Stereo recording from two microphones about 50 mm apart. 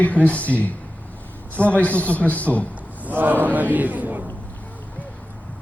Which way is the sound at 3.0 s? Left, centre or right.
Right.